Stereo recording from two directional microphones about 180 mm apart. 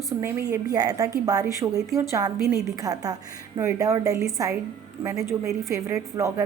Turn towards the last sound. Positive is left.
turn(degrees=-15)  # may be behind; listen again after turning